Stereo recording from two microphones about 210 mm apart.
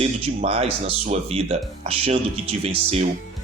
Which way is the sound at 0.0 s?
30° right (ahead or behind).